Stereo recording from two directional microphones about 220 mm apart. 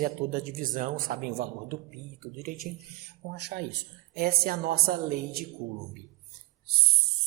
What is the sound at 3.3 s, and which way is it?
A woman's voice, 50° right (ahead or behind).